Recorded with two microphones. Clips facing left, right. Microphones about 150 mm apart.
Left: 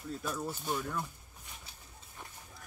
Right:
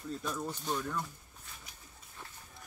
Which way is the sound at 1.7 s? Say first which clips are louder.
Left 1 dB; 30° left (ahead or behind).